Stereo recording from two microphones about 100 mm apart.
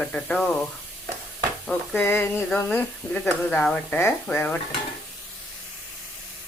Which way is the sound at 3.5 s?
5° left (ahead or behind).